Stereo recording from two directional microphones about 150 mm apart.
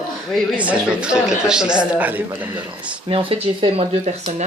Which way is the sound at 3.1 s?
40° right (ahead or behind).